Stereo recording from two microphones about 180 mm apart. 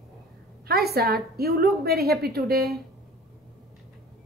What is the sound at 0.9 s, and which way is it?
A woman's voice, 60° right (ahead or behind).